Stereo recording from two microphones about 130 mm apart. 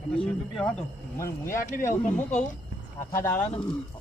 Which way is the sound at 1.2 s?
25° left (ahead or behind).